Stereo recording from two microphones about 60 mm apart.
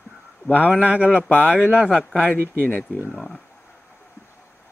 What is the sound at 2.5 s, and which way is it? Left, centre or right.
Speech, left.